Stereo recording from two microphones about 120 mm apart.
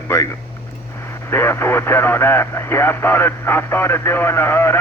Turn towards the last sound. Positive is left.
turn(degrees=20)  # may be behind; listen again after turning